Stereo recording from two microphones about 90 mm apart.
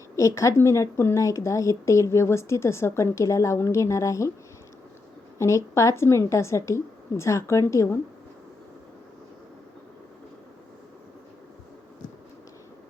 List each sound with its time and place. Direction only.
0.2 s speech: 35° left (ahead or behind)
5.4 s speech: 35° left (ahead or behind)